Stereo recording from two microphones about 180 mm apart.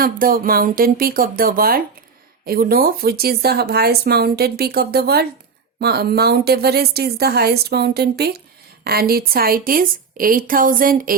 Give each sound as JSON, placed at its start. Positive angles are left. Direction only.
{"t": 0.0, "sound": "a woman's voice", "side_deg": -55}